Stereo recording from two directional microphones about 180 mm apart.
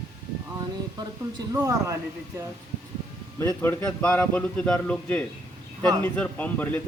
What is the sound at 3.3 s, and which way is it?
Speech, 15° left (ahead or behind).